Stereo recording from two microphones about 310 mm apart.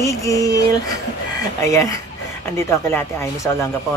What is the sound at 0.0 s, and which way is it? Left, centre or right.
Speech, centre.